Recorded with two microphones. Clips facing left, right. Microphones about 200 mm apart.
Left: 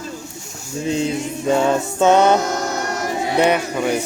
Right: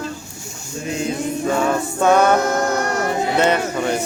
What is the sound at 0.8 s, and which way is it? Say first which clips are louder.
Music: left 2 dB; 30° left (ahead or behind).